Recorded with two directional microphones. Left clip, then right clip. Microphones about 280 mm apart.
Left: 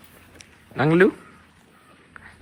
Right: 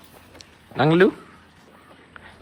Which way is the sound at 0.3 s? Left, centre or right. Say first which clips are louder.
Right 2 dB; centre.